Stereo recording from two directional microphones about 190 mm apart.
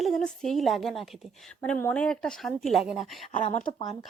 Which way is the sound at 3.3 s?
40° left (ahead or behind).